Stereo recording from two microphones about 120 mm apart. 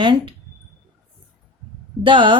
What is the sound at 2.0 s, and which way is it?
Speech, 45° right (ahead or behind).